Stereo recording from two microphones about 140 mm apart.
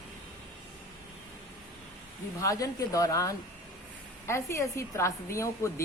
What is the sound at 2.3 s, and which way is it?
A woman's voice, 25° left (ahead or behind).